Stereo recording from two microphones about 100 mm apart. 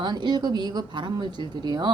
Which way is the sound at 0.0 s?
50° right (ahead or behind).